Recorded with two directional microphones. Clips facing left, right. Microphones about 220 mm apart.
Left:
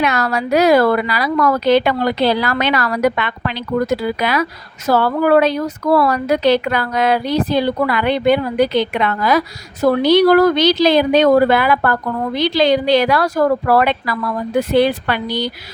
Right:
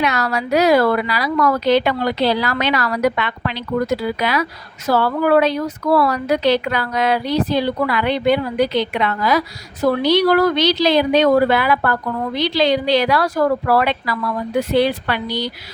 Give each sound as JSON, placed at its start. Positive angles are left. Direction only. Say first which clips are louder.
{"t": 0.0, "sound": "speech", "louder": "left 2 dB", "side_deg": 50}